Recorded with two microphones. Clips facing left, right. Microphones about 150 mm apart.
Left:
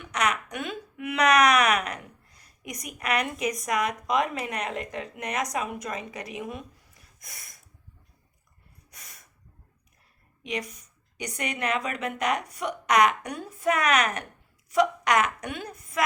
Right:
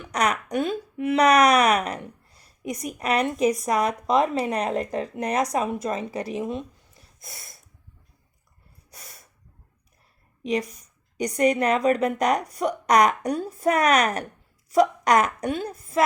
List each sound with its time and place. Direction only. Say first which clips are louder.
0.0 s a sound: right 3 dB; 35° right (ahead or behind)
0.5 s speech: right 9 dB; 35° right (ahead or behind)
10.4 s speech: right 7 dB; 35° right (ahead or behind)